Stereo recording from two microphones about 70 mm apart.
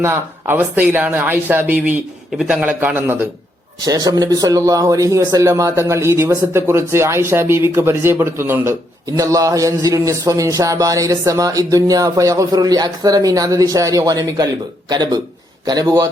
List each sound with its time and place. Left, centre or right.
0.0 s speech: right
2.4 s a man's voice: centre
2.6 s speech: right
3.8 s speech: right
9.1 s a man's voice: right
14.8 s speech: right
15.6 s a man's voice: right